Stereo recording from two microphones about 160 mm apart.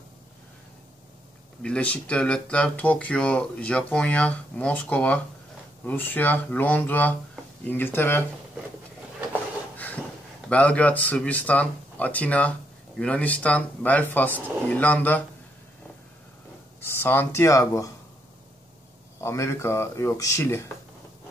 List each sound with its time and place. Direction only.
1.6 s speech: 5° left (ahead or behind)
10.5 s speech: 10° left (ahead or behind)
17.0 s speech: 15° left (ahead or behind)
19.2 s speech: 15° left (ahead or behind)